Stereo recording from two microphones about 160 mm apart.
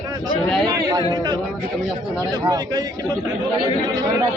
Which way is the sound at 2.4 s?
25° right (ahead or behind).